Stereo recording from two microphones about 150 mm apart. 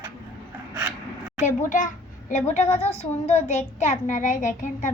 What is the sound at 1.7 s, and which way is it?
A child's voice, 60° left (ahead or behind).